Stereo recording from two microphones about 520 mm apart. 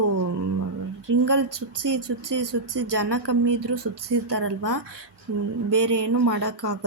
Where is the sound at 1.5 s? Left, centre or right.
Right.